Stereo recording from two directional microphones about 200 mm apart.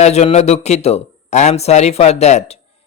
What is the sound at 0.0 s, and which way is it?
Speech, 35° left (ahead or behind).